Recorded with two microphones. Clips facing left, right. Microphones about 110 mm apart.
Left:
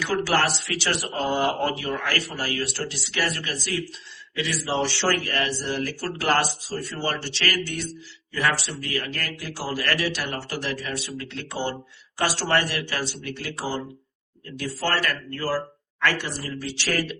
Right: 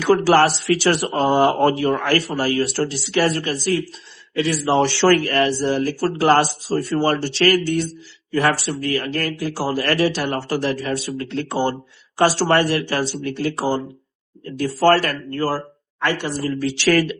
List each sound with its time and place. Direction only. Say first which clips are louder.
0.0 s speech: right 9 dB; 55° right (ahead or behind)
1.1 s speech: right 6 dB; 50° right (ahead or behind)
5.2 s speech: right 9 dB; 50° right (ahead or behind)
5.5 s speech: right 8 dB; 35° right (ahead or behind)
16.6 s speech: right 10 dB; 75° right (ahead or behind)